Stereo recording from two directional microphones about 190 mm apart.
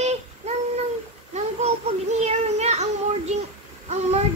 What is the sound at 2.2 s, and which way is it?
Child singing, 35° right (ahead or behind).